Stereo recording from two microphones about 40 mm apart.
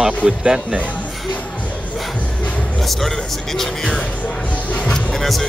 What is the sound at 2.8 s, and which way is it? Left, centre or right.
Speech, centre.